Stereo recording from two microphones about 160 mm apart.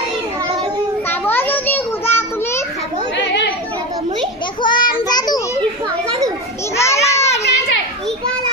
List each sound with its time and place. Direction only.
1.2 s a sound: 10° left (ahead or behind)
4.6 s child singing: 25° left (ahead or behind)
6.8 s children playing: 15° left (ahead or behind)